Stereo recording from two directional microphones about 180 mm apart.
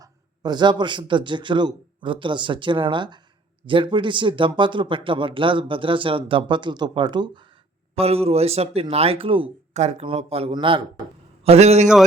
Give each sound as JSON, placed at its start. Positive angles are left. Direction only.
{"t": 0.0, "sound": "speech", "side_deg": -25}